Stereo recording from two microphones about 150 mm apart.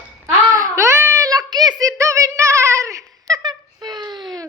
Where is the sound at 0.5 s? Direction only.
20° right (ahead or behind).